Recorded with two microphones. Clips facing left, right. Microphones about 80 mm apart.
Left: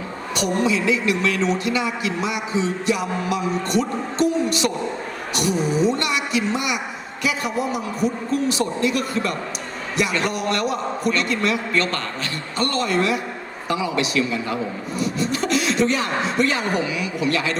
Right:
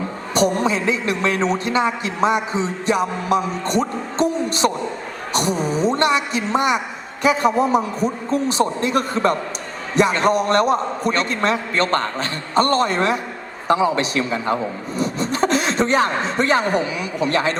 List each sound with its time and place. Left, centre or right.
0.3 s a man's voice: right